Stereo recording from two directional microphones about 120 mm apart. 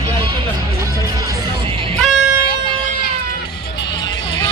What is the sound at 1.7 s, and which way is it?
Music, 50° right (ahead or behind).